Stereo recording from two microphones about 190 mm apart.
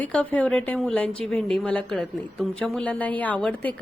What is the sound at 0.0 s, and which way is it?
A man's voice, 5° left (ahead or behind).